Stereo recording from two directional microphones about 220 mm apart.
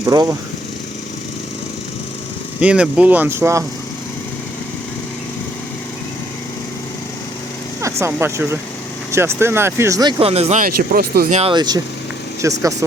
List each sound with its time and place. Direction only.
0.0 s speech: 15° right (ahead or behind)
2.6 s speech: 5° right (ahead or behind)
7.8 s speech: 15° right (ahead or behind); by 11.3 s 45° right (ahead or behind)
11.3 s speech: 20° right (ahead or behind)